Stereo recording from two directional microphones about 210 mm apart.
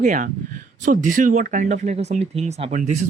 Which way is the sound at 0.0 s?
40° right (ahead or behind).